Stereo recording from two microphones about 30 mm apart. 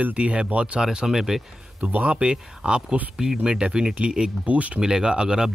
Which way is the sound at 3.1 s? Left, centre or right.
Centre.